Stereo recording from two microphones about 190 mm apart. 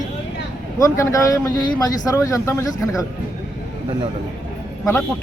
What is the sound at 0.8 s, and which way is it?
Speech, 15° left (ahead or behind).